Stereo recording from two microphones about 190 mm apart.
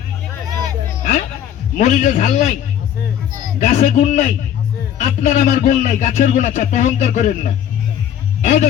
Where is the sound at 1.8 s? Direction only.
40° left (ahead or behind).